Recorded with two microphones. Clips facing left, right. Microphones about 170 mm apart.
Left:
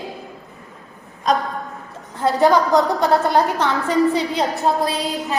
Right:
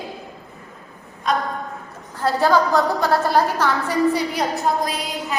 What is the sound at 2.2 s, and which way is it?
A woman's voice, 20° left (ahead or behind).